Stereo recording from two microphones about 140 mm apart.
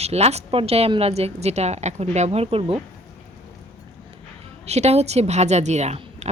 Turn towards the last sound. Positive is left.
turn(degrees=-50)  # may be behind; listen again after turning